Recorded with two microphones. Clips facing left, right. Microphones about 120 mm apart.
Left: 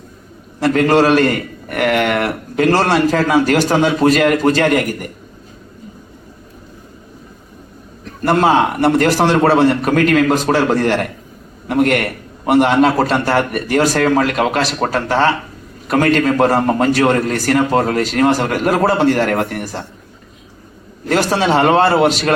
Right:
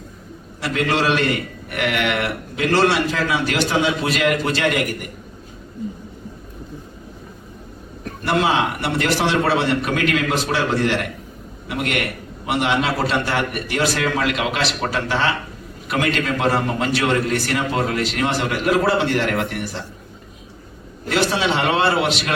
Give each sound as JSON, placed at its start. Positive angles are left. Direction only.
{"t": 0.6, "sound": "a man's voice", "side_deg": 45}
{"t": 8.2, "sound": "a man's voice", "side_deg": 45}
{"t": 21.1, "sound": "a man's voice", "side_deg": 45}